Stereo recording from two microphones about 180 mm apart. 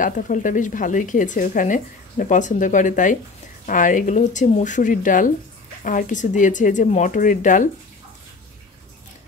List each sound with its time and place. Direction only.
0.0 s speech: 45° left (ahead or behind)